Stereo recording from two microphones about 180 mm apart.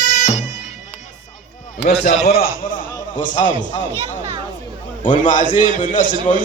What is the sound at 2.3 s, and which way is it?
Speech, 55° left (ahead or behind).